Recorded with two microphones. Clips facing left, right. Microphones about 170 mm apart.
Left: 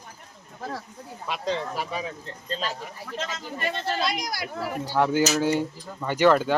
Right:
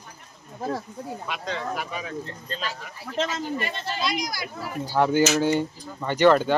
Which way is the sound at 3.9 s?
55° left (ahead or behind).